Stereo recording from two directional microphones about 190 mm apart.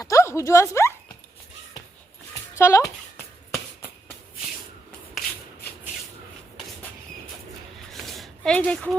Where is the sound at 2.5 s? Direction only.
15° left (ahead or behind).